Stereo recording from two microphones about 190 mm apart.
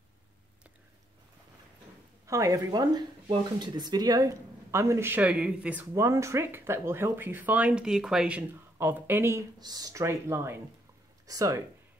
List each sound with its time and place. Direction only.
2.2 s speech: 15° right (ahead or behind)